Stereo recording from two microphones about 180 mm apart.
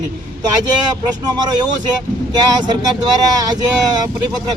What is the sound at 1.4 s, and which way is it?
Speech, 25° right (ahead or behind).